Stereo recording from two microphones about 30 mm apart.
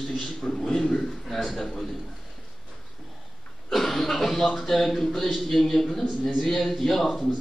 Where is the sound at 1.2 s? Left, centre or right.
Centre.